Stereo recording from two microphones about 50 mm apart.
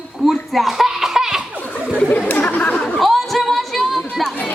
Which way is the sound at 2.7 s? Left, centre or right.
Centre.